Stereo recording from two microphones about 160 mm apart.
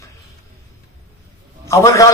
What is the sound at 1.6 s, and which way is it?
Speech, 20° left (ahead or behind).